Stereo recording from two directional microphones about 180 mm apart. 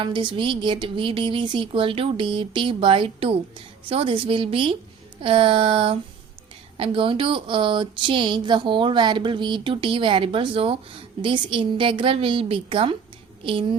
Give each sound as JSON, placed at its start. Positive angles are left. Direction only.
{"t": 0.0, "sound": "speech", "side_deg": -25}
{"t": 5.2, "sound": "a sound", "side_deg": -30}
{"t": 6.7, "sound": "speech", "side_deg": -30}